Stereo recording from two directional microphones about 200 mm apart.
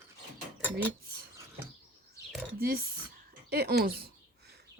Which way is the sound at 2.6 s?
50° right (ahead or behind).